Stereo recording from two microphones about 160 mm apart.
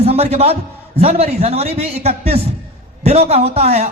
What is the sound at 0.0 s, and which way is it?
A man's voice, 40° right (ahead or behind).